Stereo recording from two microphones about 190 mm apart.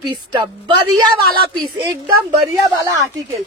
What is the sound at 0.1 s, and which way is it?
Speech, 25° right (ahead or behind).